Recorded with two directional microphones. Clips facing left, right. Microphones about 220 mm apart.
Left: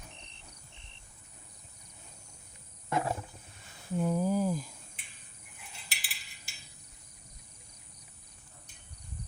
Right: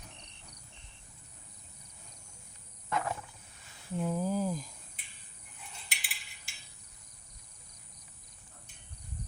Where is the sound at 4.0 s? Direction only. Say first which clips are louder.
Left 3 dB; 5° left (ahead or behind).